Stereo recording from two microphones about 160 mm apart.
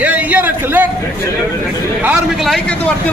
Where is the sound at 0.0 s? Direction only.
10° right (ahead or behind).